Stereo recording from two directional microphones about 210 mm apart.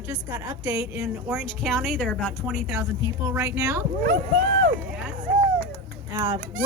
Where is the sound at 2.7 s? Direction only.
10° right (ahead or behind).